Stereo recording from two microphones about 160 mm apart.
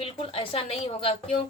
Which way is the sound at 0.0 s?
35° left (ahead or behind).